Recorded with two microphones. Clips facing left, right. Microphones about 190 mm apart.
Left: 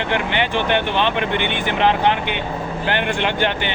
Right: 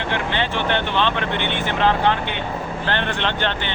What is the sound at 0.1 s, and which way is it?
Speech, 15° left (ahead or behind).